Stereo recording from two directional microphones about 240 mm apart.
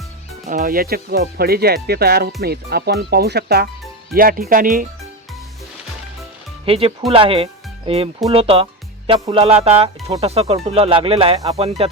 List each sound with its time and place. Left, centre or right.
0.4 s speech: right
6.7 s speech: right